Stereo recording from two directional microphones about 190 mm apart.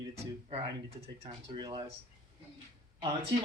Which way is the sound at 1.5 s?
25° right (ahead or behind).